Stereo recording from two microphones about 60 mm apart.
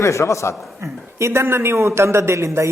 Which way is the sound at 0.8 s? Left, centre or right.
Right.